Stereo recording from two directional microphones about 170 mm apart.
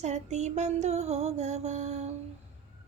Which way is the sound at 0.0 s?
40° right (ahead or behind).